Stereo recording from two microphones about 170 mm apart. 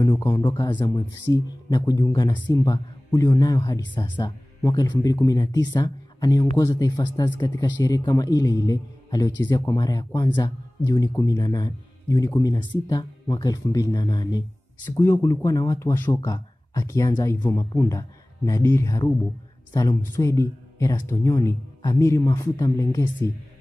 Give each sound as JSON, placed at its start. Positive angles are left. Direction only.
{"t": 0.0, "sound": "speech", "side_deg": 20}